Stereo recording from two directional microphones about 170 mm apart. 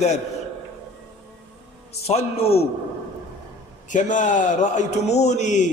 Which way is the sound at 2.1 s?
35° left (ahead or behind).